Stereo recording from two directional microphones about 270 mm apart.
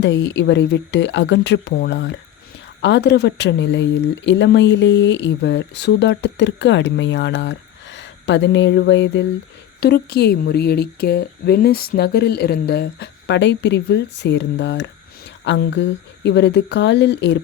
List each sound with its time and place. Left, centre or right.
0.0 s speech: left